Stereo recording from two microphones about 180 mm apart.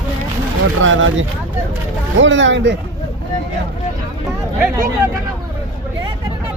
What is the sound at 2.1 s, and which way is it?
Speech, 90° right.